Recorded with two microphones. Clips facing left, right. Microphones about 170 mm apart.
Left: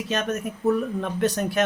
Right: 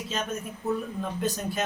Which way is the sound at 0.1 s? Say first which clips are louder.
Left 6 dB; 75° left (ahead or behind).